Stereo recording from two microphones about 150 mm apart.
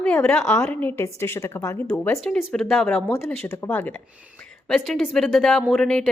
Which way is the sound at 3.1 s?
15° left (ahead or behind).